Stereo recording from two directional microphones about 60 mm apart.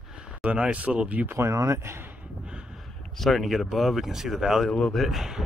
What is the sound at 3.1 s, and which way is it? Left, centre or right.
Speech, centre.